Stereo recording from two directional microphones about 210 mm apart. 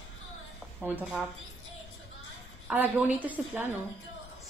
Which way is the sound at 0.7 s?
5° right (ahead or behind).